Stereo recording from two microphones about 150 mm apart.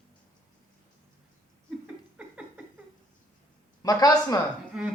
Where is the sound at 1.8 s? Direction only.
10° right (ahead or behind).